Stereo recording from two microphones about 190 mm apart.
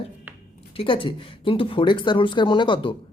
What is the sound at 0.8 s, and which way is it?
Speech, 25° left (ahead or behind).